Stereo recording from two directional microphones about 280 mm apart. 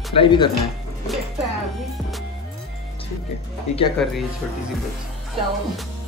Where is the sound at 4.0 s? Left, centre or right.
Centre.